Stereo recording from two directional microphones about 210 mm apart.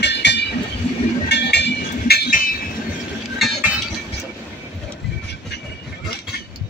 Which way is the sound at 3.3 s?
Centre (ahead or behind).